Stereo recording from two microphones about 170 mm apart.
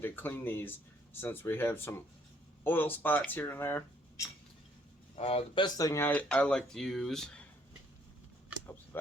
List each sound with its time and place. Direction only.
0.0 s speech: 10° left (ahead or behind)
5.1 s speech: 35° left (ahead or behind); by 7.4 s 5° left (ahead or behind)